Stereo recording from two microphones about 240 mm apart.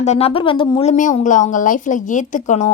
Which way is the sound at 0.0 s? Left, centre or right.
Left.